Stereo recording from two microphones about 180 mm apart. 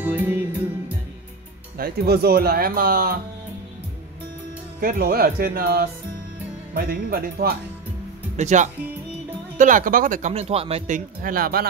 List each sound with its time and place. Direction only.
0.0 s music: 10° right (ahead or behind)
1.8 s speech: 60° right (ahead or behind)
4.7 s speech: 55° right (ahead or behind)
8.4 s speech: 40° right (ahead or behind)
11.2 s speech: 50° right (ahead or behind)